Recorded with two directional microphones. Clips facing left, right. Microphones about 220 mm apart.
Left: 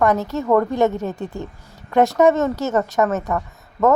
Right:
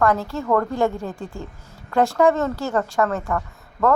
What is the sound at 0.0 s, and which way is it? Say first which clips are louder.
A woman's voice: left 2 dB; 20° left (ahead or behind).